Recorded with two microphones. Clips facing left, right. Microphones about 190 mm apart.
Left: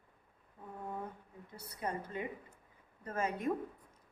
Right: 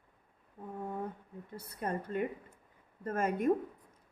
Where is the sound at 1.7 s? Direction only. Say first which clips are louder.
Right 4 dB; 55° right (ahead or behind).